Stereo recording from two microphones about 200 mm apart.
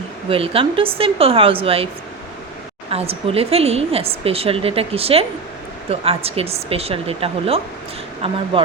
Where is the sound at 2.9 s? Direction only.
30° right (ahead or behind).